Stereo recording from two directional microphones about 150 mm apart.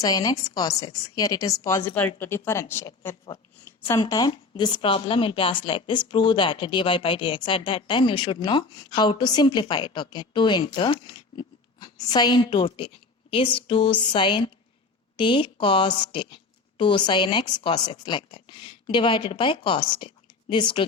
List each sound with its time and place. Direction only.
0.0 s a woman's voice: 25° left (ahead or behind)
4.0 s speech: 30° left (ahead or behind)